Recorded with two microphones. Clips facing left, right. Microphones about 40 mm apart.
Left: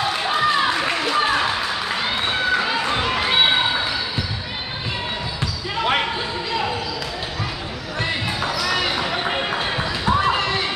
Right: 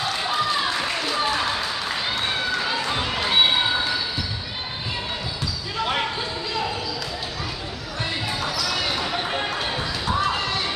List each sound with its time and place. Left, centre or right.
0.2 s run: left
8.5 s basketball bounce: left